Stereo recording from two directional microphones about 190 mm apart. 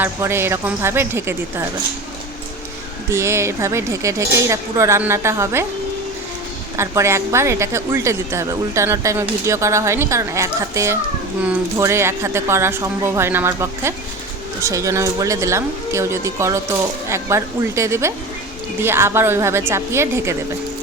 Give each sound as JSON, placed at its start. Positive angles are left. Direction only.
{"t": 0.0, "sound": "a woman's voice", "side_deg": -15}
{"t": 3.1, "sound": "a woman's voice", "side_deg": -15}
{"t": 6.7, "sound": "a woman's voice", "side_deg": -15}